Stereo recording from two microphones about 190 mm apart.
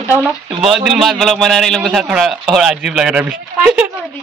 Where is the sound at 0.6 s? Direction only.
Centre (ahead or behind).